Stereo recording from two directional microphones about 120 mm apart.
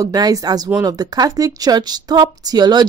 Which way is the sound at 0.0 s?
30° right (ahead or behind).